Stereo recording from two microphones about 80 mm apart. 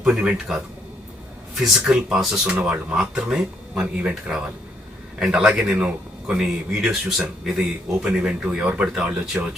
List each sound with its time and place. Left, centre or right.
0.0 s speech: centre